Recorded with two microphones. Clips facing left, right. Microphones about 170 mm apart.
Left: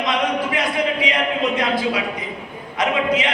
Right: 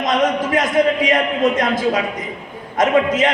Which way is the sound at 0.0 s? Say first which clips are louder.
Right 4 dB; 45° right (ahead or behind).